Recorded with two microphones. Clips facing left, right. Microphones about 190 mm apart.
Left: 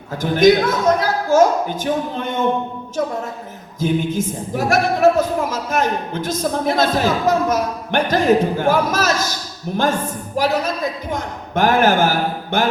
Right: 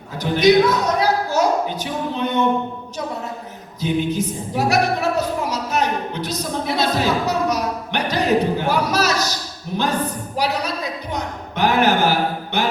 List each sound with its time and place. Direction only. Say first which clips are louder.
0.2 s speech: left 1 dB; 50° left (ahead or behind)
3.8 s speech: left 1 dB; 50° left (ahead or behind)
10.3 s speech: left 4 dB; 50° left (ahead or behind)